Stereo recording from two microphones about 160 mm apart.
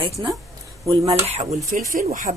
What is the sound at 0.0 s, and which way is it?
Speech, 30° right (ahead or behind).